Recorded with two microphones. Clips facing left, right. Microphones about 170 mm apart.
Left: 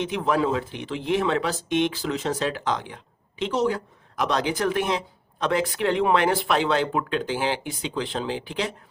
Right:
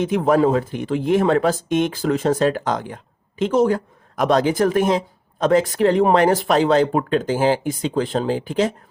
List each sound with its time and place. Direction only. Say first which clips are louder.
0.0 s speech: right 7 dB; 45° right (ahead or behind)